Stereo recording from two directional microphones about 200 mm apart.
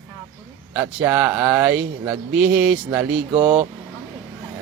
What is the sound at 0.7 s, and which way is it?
Speech, 10° right (ahead or behind).